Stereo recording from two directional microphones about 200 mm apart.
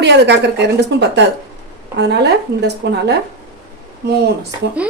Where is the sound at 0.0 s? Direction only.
60° right (ahead or behind).